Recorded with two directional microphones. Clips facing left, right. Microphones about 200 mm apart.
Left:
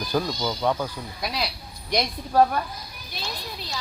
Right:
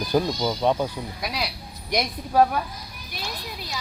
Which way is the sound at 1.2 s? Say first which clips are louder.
Left 2 dB; 10° right (ahead or behind).